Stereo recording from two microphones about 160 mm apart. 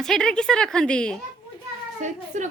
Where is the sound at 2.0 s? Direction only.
50° right (ahead or behind).